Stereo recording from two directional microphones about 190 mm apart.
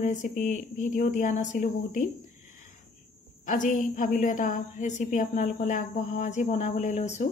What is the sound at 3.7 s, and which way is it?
A woman's voice, 45° left (ahead or behind).